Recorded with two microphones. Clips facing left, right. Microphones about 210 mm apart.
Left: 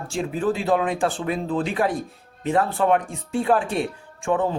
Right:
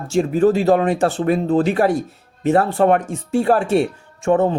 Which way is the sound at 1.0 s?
65° right (ahead or behind).